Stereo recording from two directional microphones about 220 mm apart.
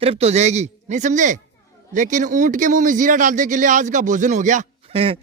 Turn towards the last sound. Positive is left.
turn(degrees=-25)  # may be behind; listen again after turning